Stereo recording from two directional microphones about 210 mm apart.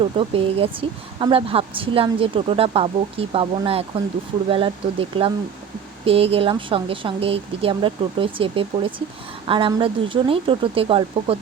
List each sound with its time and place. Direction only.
0.0 s speech: 25° right (ahead or behind)